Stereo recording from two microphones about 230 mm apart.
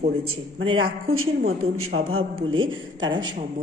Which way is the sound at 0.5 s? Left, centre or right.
Right.